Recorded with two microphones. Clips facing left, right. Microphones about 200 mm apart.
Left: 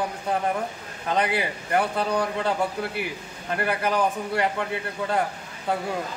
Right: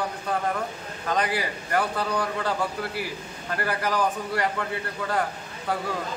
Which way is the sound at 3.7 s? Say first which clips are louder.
Left 1 dB; 20° left (ahead or behind).